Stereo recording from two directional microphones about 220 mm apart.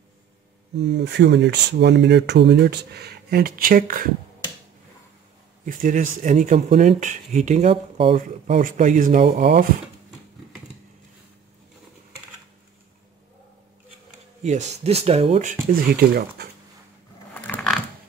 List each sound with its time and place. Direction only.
0.7 s speech: 50° right (ahead or behind)
5.7 s speech: 40° right (ahead or behind)
14.4 s speech: 30° right (ahead or behind)
15.7 s speech: 40° right (ahead or behind)
17.3 s mechanisms: 5° left (ahead or behind)